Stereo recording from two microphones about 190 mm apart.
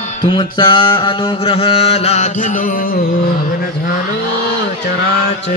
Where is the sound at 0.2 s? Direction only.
25° left (ahead or behind).